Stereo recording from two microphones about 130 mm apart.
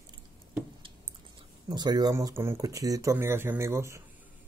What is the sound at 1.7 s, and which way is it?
Speech, 30° right (ahead or behind).